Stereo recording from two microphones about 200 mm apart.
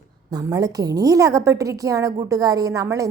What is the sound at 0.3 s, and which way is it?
A woman's voice, 20° right (ahead or behind).